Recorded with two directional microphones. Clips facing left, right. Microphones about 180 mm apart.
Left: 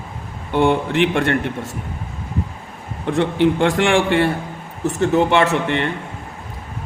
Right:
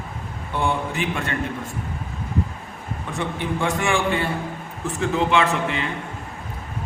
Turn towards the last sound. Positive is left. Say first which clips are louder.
# left 5 dB
turn(degrees=65)  # may be behind; listen again after turning